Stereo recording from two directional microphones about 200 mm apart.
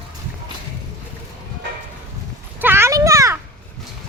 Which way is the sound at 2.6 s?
10° right (ahead or behind).